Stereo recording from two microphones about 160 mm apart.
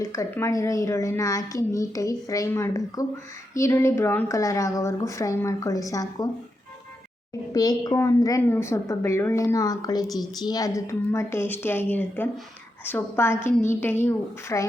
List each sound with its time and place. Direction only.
0.0 s a woman's voice: 20° left (ahead or behind)
7.5 s a woman's voice: 25° left (ahead or behind)